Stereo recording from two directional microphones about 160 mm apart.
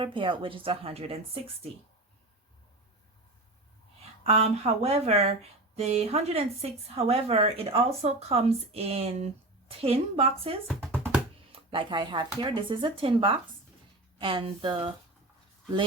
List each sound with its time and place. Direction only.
0.0 s speech: 30° right (ahead or behind)
4.2 s speech: 40° right (ahead or behind)